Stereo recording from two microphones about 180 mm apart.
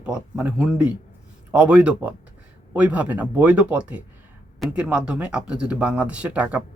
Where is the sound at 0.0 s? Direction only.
5° right (ahead or behind).